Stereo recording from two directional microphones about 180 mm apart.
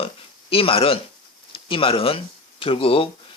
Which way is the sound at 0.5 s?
30° left (ahead or behind).